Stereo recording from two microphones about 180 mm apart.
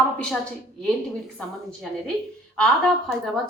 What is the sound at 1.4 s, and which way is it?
A woman's voice, 5° left (ahead or behind).